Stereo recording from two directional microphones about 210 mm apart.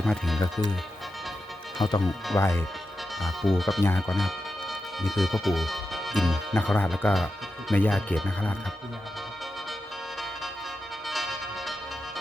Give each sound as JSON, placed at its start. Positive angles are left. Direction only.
{"t": 0.0, "sound": "speech", "side_deg": 0}
{"t": 1.8, "sound": "speech", "side_deg": 20}
{"t": 3.2, "sound": "speech", "side_deg": 0}
{"t": 3.8, "sound": "speech", "side_deg": 15}
{"t": 4.1, "sound": "music", "side_deg": 0}
{"t": 6.5, "sound": "speech", "side_deg": 10}
{"t": 11.1, "sound": "music", "side_deg": 0}